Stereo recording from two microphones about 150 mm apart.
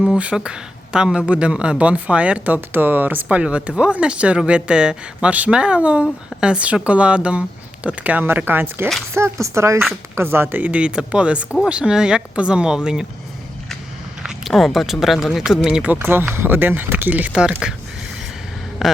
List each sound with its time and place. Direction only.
0.0 s speech: 5° right (ahead or behind)
14.2 s speech: 5° right (ahead or behind)
18.8 s speech: 5° right (ahead or behind)